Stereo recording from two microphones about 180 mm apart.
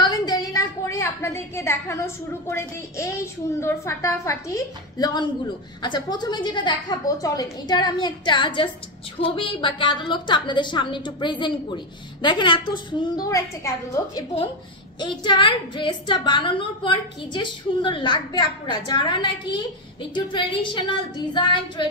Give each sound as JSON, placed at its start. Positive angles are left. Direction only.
{"t": 0.0, "sound": "a woman's voice", "side_deg": 20}